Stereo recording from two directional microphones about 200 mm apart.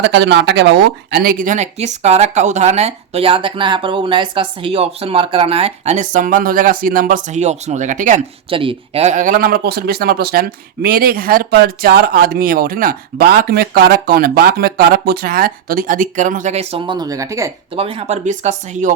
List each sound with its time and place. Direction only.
0.0 s speech: 60° right (ahead or behind); by 8.2 s 40° right (ahead or behind)
8.4 s speech: 25° right (ahead or behind)
17.7 s speech: 30° right (ahead or behind)